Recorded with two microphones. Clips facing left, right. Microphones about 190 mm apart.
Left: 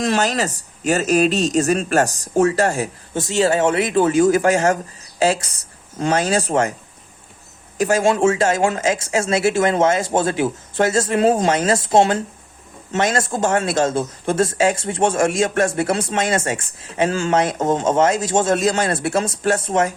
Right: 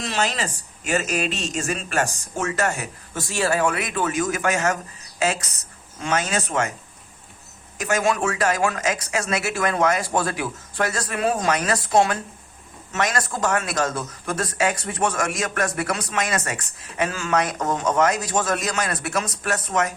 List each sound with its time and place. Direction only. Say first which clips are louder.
0.0 s speech: left 6 dB; 45° left (ahead or behind)
7.8 s a man's voice: left 6 dB; 30° left (ahead or behind)